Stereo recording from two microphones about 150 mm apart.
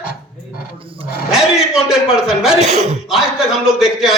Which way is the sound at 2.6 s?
50° right (ahead or behind).